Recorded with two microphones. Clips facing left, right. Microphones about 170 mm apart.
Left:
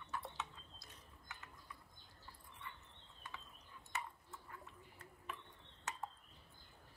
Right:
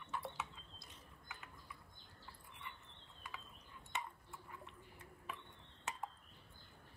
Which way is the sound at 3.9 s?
20° right (ahead or behind).